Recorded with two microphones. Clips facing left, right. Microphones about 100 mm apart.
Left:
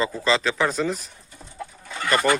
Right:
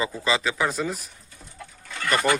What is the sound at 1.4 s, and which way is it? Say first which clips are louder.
Chicken: left 7 dB; 20° left (ahead or behind).